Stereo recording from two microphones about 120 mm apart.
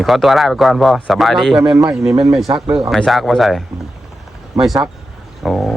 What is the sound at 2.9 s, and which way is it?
Speech, centre (ahead or behind).